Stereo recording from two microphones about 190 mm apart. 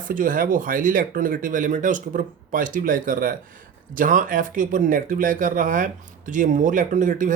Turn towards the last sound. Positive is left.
turn(degrees=-45)  # may be behind; listen again after turning